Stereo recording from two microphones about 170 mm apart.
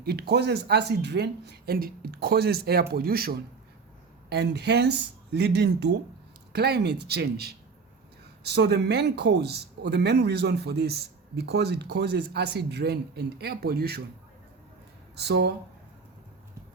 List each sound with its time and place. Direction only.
0.0 s speech: 70° right (ahead or behind)
4.3 s speech: 80° right
8.5 s speech: 75° right (ahead or behind)
15.1 s speech: 75° right (ahead or behind)